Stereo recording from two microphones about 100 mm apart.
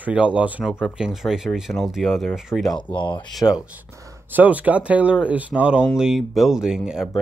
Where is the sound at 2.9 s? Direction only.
50° left (ahead or behind).